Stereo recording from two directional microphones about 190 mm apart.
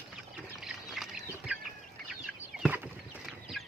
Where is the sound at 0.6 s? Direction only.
Centre (ahead or behind).